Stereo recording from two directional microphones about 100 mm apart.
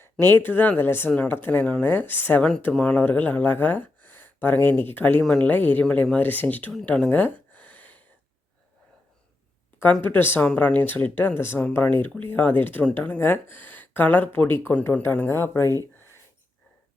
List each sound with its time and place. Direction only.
0.0 s speech: 25° left (ahead or behind)
5.2 s speech: 5° left (ahead or behind)
5.5 s speech: 20° left (ahead or behind)
6.8 s a sound: 15° left (ahead or behind)
9.8 s speech: 20° left (ahead or behind)